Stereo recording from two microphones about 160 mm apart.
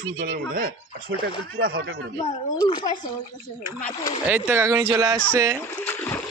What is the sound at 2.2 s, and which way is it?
Speech, 25° left (ahead or behind).